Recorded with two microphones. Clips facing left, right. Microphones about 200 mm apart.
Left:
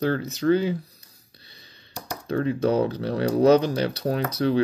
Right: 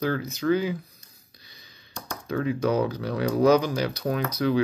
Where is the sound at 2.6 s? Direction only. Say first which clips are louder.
Left 2 dB; 30° left (ahead or behind).